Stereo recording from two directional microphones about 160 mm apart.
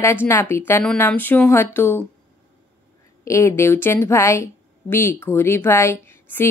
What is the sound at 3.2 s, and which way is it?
A woman's voice, 15° left (ahead or behind).